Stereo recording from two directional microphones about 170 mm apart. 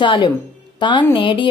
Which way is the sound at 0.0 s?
30° left (ahead or behind).